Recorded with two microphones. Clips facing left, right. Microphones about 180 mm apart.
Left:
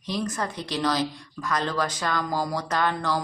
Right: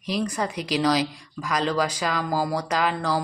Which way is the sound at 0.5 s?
90° right.